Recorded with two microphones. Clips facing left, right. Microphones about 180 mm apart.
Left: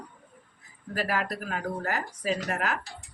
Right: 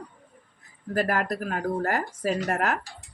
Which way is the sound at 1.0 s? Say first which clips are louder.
Right 4 dB; 50° right (ahead or behind).